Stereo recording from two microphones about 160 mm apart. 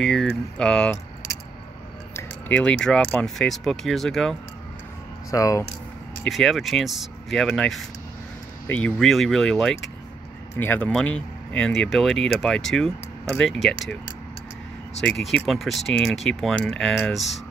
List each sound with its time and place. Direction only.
0.0 s speech: 5° left (ahead or behind)
2.1 s speech: 10° left (ahead or behind)
5.3 s speech: 20° left (ahead or behind)
6.2 s speech: centre (ahead or behind)
15.0 s speech: centre (ahead or behind)